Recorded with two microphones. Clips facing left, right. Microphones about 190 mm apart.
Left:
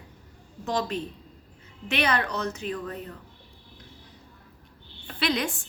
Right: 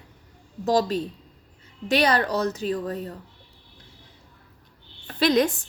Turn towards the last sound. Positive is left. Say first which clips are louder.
# right 7 dB
turn(degrees=-40)  # may be behind; listen again after turning